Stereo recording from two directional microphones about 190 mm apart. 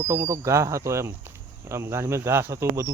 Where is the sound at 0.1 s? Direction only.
15° right (ahead or behind).